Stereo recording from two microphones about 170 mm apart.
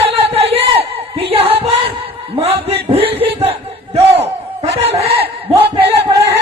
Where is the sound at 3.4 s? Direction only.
35° right (ahead or behind).